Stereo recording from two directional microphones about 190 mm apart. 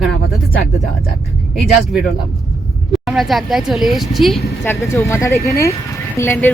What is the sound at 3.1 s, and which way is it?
Speech, centre (ahead or behind).